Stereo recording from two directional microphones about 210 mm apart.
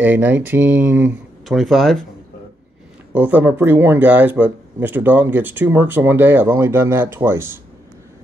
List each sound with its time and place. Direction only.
0.0 s speech: 10° right (ahead or behind)
3.2 s speech: 5° right (ahead or behind)